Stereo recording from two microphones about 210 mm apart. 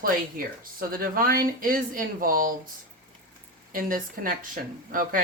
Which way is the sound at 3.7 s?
40° right (ahead or behind).